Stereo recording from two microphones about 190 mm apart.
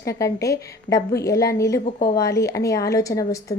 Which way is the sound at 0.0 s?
15° left (ahead or behind).